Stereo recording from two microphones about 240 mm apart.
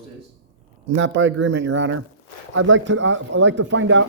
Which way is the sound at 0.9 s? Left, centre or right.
Right.